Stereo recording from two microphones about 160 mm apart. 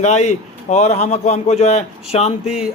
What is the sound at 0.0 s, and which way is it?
A man's voice, 45° left (ahead or behind).